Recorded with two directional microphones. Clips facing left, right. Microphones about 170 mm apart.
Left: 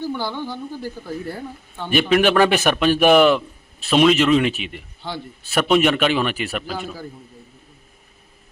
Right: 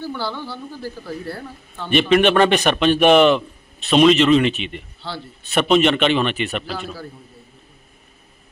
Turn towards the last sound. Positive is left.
turn(degrees=15)  # may be behind; listen again after turning